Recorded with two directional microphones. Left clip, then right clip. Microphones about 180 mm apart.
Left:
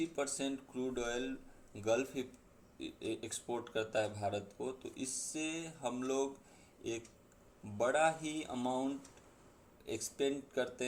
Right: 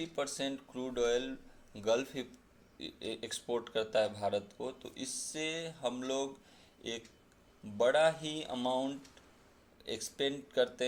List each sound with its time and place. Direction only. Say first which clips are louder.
0.0 s speech: right 1 dB; 15° right (ahead or behind)
7.8 s a man's voice: right 4 dB; 20° right (ahead or behind)